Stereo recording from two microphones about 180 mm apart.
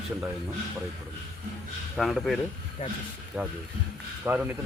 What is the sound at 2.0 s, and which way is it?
Speech, centre (ahead or behind).